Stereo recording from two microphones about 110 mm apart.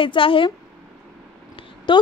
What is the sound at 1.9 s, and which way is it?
Speech, 45° left (ahead or behind).